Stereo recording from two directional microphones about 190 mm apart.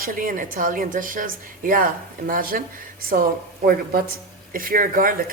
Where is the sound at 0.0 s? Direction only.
45° right (ahead or behind).